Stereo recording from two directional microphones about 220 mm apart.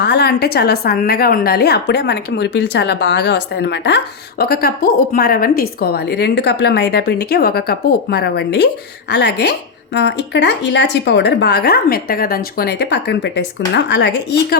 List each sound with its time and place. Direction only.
0.0 s a woman's voice: 50° left (ahead or behind)